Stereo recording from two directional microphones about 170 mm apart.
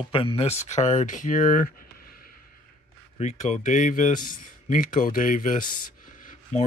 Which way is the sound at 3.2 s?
45° left (ahead or behind).